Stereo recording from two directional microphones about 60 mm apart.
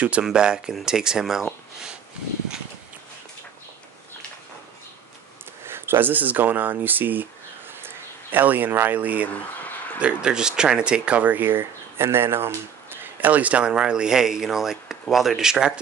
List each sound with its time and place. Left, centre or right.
0.2 s speech: centre
5.7 s speech: right
9.3 s a sound: left
9.9 s speech: centre; by 12.5 s right
13.0 s speech: right; by 15.8 s centre